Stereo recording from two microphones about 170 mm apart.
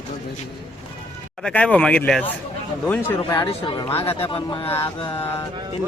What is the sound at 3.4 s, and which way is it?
Speech, 30° left (ahead or behind).